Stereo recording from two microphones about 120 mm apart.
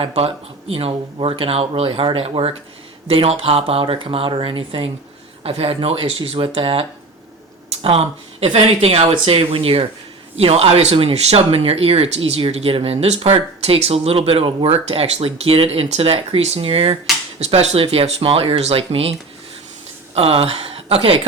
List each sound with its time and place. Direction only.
0.0 s speech: 55° right (ahead or behind)
17.4 s speech: 65° right (ahead or behind)
20.1 s speech: 55° right (ahead or behind)